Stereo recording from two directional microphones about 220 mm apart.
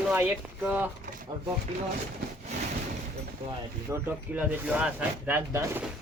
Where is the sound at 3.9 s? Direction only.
10° right (ahead or behind).